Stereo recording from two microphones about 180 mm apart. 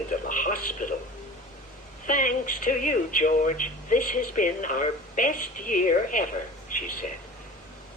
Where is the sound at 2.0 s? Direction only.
50° left (ahead or behind).